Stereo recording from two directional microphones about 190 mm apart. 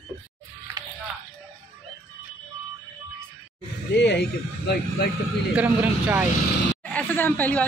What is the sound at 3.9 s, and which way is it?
Speech, 60° left (ahead or behind).